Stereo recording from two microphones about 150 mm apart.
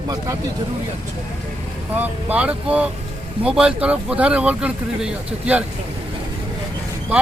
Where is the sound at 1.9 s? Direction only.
10° right (ahead or behind).